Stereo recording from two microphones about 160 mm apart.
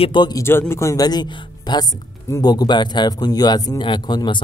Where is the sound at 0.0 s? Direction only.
30° left (ahead or behind).